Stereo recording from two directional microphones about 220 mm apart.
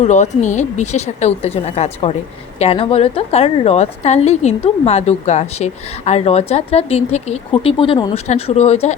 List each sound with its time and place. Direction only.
0.0 s a woman's voice: 30° left (ahead or behind)